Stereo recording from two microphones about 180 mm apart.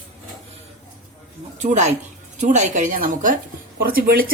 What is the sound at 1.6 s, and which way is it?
A woman's voice, 40° right (ahead or behind).